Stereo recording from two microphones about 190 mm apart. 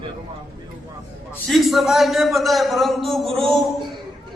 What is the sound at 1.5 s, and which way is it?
A man's voice, centre (ahead or behind).